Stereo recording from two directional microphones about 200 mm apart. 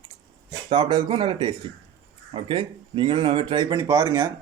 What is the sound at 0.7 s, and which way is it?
Speech, 20° right (ahead or behind).